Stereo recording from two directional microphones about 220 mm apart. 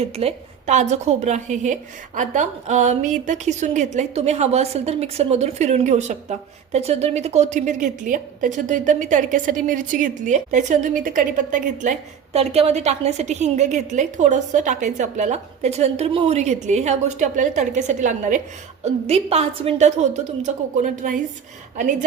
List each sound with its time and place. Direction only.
0.0 s a woman's voice: 25° right (ahead or behind)